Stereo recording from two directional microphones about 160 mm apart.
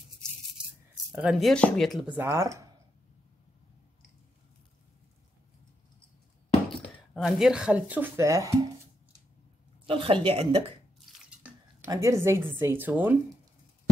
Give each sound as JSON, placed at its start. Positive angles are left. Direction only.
{"t": 1.1, "sound": "speech", "side_deg": -10}
{"t": 1.5, "sound": "speech", "side_deg": 5}
{"t": 2.0, "sound": "speech", "side_deg": -15}
{"t": 7.2, "sound": "speech", "side_deg": -5}
{"t": 9.8, "sound": "speech", "side_deg": -35}
{"t": 11.9, "sound": "speech", "side_deg": -20}